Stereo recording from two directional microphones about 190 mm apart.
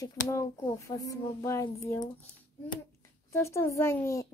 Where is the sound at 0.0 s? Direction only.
15° left (ahead or behind).